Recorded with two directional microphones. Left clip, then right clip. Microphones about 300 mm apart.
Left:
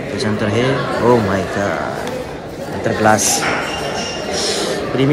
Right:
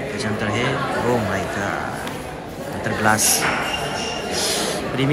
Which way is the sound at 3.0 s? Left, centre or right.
Centre.